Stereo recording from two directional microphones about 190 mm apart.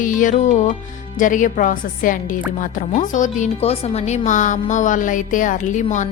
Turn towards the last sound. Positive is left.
turn(degrees=40)  # may be behind; listen again after turning